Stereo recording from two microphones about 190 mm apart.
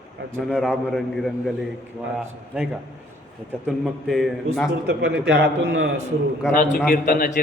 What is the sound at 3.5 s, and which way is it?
Speech, centre (ahead or behind).